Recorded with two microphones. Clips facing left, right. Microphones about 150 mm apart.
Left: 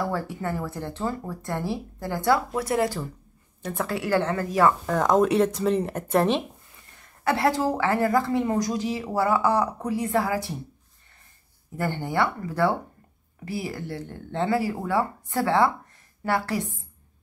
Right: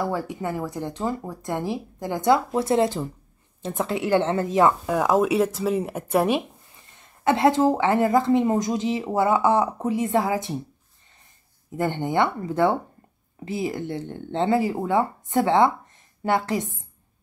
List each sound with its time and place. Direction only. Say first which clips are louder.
0.0 s a woman's voice: right 2 dB; 15° right (ahead or behind)
4.8 s speech: even; 10° right (ahead or behind)
7.0 s a woman's voice: right 4 dB; 20° right (ahead or behind)
11.7 s a woman's voice: right 3 dB; 20° right (ahead or behind)